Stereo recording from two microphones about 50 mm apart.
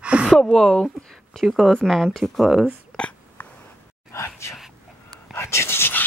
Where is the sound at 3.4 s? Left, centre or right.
Left.